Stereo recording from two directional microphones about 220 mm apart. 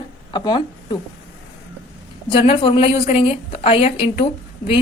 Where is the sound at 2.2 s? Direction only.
25° left (ahead or behind).